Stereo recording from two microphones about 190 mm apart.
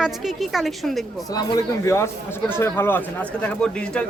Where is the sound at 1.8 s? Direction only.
15° left (ahead or behind).